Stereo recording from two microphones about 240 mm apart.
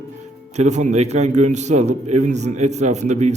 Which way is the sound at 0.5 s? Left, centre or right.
Right.